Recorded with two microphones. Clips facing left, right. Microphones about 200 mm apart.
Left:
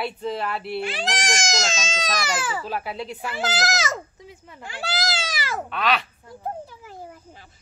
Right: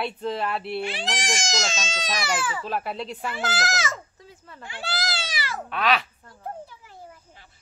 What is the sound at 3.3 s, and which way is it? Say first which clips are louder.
Speech: left 4 dB; 40° left (ahead or behind).